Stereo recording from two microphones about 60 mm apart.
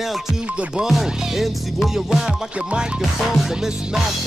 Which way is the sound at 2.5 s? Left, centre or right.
Centre.